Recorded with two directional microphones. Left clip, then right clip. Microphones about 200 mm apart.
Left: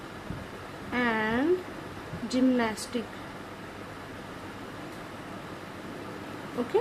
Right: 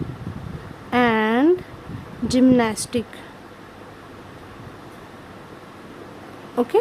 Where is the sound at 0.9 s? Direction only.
60° right (ahead or behind).